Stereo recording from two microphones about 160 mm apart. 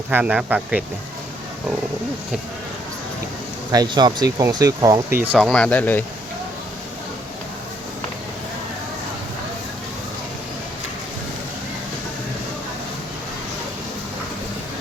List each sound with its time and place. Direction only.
0.1 s a man's voice: 10° right (ahead or behind)
3.7 s speech: 25° right (ahead or behind)
5.1 s a man's voice: 10° right (ahead or behind)
5.4 s speech: 5° left (ahead or behind)